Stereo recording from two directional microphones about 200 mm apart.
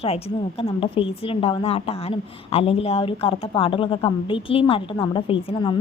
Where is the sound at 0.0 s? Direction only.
30° left (ahead or behind).